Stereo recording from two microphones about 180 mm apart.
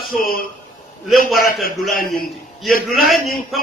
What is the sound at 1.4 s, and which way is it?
Speech, 55° left (ahead or behind).